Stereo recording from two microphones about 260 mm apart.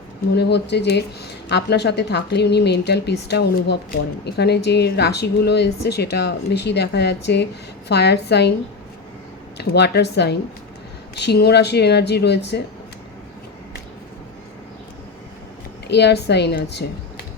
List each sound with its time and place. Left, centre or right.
0.3 s speech: left
9.6 s speech: left
15.9 s speech: left